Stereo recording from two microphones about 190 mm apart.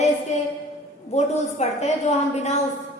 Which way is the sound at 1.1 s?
35° left (ahead or behind).